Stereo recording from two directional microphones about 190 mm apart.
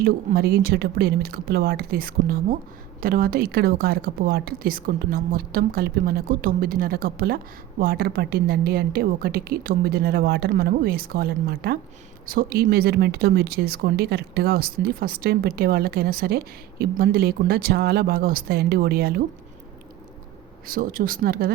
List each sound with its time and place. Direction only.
0.0 s a woman's voice: 55° right (ahead or behind)
20.7 s a woman's voice: 45° right (ahead or behind)